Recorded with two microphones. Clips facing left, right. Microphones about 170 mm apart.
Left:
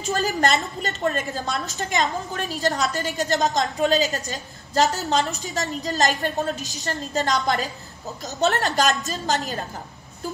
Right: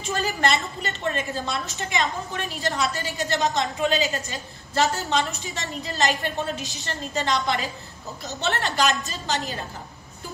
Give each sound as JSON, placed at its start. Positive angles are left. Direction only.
{"t": 0.0, "sound": "a woman's voice", "side_deg": 40}